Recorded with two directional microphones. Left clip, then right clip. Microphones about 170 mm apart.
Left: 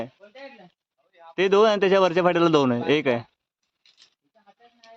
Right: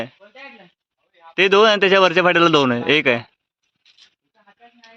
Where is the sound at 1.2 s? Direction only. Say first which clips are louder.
Right 5 dB; centre (ahead or behind).